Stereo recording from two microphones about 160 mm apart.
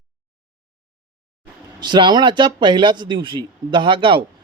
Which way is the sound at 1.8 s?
30° right (ahead or behind).